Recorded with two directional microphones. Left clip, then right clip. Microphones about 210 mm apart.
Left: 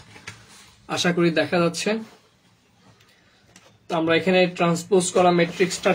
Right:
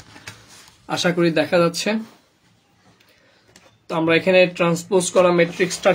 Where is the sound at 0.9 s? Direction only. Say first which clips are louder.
Right 2 dB; 35° right (ahead or behind).